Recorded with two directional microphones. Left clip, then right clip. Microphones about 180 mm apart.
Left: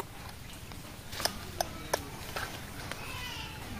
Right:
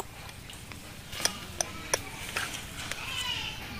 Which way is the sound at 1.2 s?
20° left (ahead or behind).